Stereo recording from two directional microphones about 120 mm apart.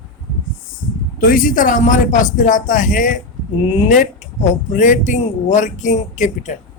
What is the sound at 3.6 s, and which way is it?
Speech, 75° left (ahead or behind).